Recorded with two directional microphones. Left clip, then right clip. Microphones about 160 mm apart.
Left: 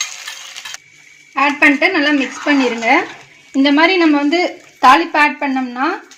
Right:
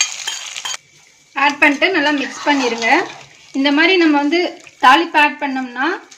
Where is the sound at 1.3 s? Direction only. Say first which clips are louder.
Left 1 dB; 35° left (ahead or behind).